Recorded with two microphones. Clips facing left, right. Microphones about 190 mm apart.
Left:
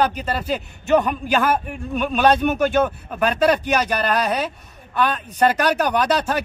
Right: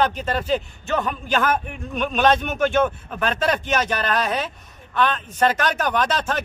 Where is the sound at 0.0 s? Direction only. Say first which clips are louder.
Left 1 dB; 10° left (ahead or behind).